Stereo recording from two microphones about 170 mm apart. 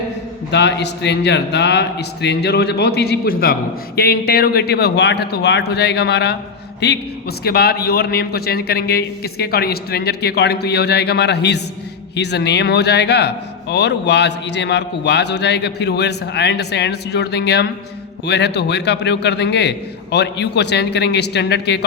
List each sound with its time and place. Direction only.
0.5 s a man's voice: 85° left
7.4 s a man's voice: 65° left (ahead or behind)